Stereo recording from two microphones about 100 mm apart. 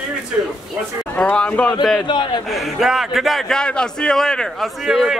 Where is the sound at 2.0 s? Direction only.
50° left (ahead or behind).